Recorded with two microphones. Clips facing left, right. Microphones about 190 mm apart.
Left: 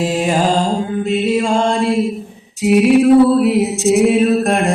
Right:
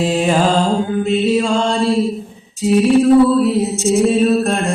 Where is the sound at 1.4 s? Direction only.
50° left (ahead or behind).